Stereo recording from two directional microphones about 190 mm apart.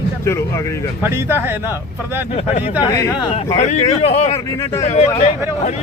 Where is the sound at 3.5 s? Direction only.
35° left (ahead or behind).